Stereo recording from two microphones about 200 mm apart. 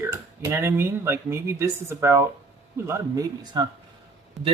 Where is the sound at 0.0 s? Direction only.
10° right (ahead or behind).